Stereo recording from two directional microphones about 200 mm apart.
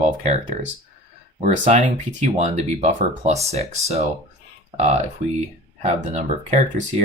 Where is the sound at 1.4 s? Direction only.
35° right (ahead or behind).